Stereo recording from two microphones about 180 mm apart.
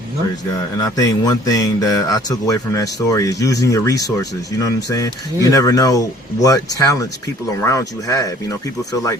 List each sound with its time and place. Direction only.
0.8 s speech: 20° left (ahead or behind)